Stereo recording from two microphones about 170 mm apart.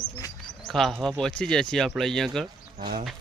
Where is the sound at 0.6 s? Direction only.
Centre (ahead or behind).